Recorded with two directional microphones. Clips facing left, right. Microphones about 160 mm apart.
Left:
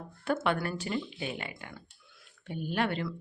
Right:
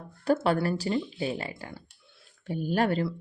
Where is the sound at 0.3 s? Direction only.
35° right (ahead or behind).